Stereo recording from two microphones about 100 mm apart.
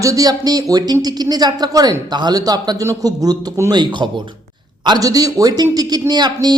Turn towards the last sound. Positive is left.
turn(degrees=-45)  # may be behind; listen again after turning